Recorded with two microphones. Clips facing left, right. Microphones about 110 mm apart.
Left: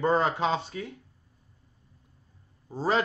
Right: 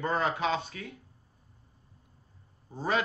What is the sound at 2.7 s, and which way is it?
Speech, 30° left (ahead or behind).